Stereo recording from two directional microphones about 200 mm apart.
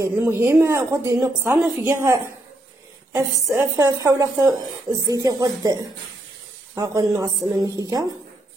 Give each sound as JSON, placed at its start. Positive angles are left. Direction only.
{"t": 0.0, "sound": "a woman's voice", "side_deg": -15}